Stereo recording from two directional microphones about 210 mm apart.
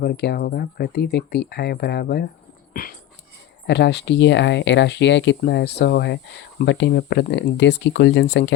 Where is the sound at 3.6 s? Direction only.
55° left (ahead or behind).